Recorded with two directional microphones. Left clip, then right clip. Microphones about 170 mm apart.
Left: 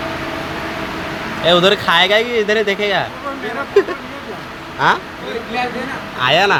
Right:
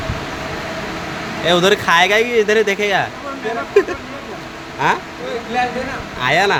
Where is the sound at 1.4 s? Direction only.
20° right (ahead or behind).